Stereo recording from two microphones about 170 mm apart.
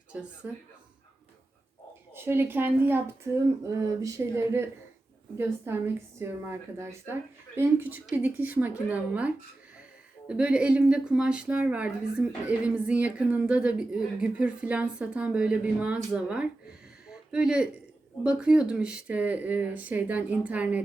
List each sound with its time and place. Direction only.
0.1 s a woman's voice: 5° right (ahead or behind)
2.1 s a woman's voice: 15° right (ahead or behind)
17.1 s a sound: 5° right (ahead or behind)
18.2 s a woman's voice: 5° right (ahead or behind)